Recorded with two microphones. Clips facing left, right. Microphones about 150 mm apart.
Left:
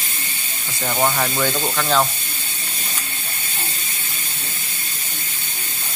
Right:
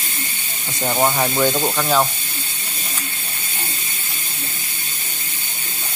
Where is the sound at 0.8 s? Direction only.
15° right (ahead or behind).